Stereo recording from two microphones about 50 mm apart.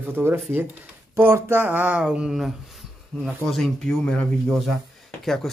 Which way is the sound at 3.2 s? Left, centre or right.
Centre.